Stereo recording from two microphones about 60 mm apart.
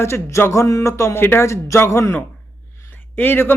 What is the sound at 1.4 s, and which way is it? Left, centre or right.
Speech, left.